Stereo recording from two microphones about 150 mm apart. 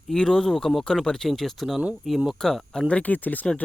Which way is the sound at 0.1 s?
5° left (ahead or behind).